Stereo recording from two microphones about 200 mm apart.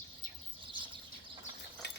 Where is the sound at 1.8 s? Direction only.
60° left (ahead or behind).